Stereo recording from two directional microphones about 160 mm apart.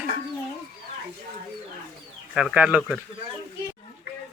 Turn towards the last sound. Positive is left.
turn(degrees=0)  # may be behind; listen again after turning